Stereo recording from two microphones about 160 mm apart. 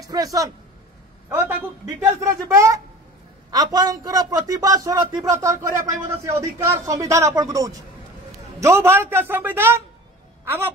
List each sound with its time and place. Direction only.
0.0 s a woman's voice: 20° right (ahead or behind)